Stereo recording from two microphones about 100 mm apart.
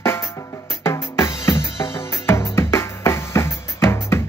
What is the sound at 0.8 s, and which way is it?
Music, 25° left (ahead or behind).